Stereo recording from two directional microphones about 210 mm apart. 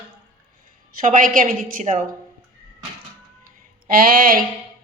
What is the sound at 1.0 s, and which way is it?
A woman's voice, 40° right (ahead or behind).